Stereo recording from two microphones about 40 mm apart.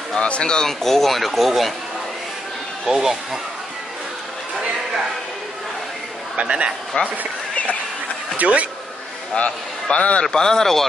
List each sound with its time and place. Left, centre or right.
0.2 s speech: left
0.7 s speech: centre
2.8 s speech: centre
6.4 s speech: right
7.0 s a man's voice: left
8.4 s speech: right
9.3 s a man's voice: left
10.3 s speech: centre